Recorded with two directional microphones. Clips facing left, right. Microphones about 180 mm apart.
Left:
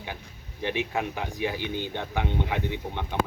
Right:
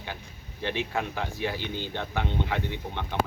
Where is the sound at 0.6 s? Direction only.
15° left (ahead or behind).